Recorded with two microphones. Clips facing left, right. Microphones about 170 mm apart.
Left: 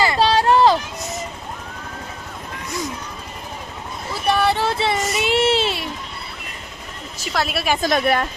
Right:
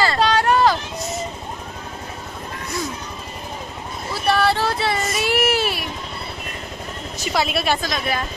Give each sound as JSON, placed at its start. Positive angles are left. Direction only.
{"t": 0.2, "sound": "a sound", "side_deg": 30}
{"t": 4.3, "sound": "child singing", "side_deg": 20}
{"t": 7.3, "sound": "a woman's voice", "side_deg": 5}
{"t": 7.8, "sound": "speech", "side_deg": 60}